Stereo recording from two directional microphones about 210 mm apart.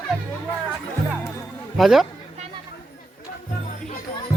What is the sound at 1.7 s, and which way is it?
Speech, centre (ahead or behind).